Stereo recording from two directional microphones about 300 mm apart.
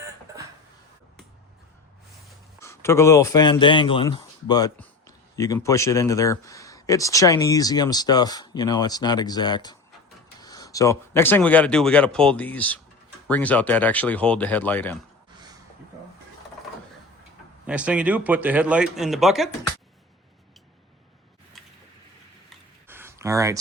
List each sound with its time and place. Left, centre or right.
2.6 s speech: centre
17.7 s speech: centre
22.9 s a sound: centre